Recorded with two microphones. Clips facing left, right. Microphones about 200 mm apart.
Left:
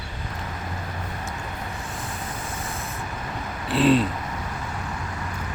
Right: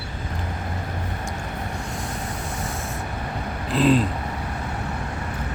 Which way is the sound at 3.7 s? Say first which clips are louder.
Even; centre (ahead or behind).